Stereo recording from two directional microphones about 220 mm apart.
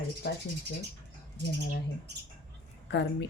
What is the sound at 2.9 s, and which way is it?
Speech, 55° left (ahead or behind).